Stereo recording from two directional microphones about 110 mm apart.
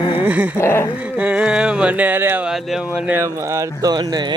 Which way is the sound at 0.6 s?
20° left (ahead or behind).